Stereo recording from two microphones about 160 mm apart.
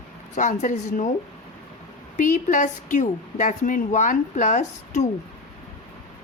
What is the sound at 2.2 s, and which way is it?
Speech, 55° left (ahead or behind).